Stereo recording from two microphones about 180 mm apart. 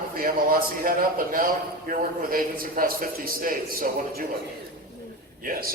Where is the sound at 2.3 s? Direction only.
50° right (ahead or behind).